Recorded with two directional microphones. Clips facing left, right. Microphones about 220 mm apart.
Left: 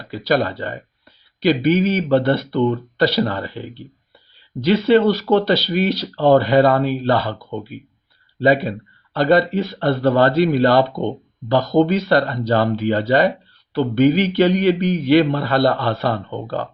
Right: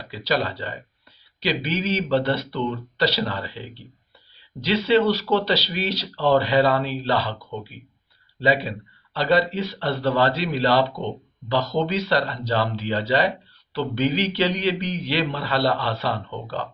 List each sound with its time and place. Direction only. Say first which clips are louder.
0.1 s speech: left 6 dB; 50° left (ahead or behind)
8.4 s speech: left 6 dB; 50° left (ahead or behind)